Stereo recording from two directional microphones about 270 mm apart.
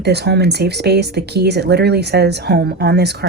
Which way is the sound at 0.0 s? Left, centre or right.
Right.